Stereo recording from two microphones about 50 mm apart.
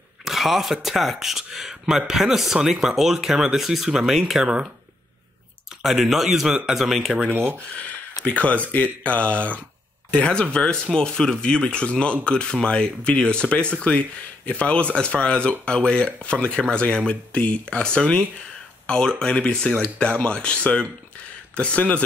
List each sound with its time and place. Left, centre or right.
0.2 s speech: centre
5.8 s speech: centre
7.2 s speech: right
8.3 s speech: left